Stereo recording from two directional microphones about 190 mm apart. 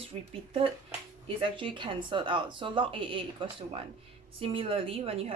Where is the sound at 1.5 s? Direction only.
25° right (ahead or behind).